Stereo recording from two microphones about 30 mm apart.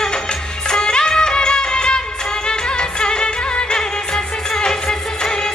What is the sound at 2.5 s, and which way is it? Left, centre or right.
Music, left.